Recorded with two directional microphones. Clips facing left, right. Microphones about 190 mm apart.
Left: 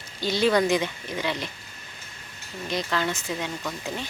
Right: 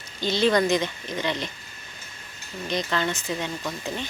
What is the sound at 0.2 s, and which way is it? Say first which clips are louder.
Speech: even; 10° left (ahead or behind).